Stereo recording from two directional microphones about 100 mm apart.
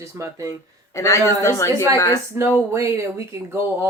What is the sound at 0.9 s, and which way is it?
Speech, 30° left (ahead or behind).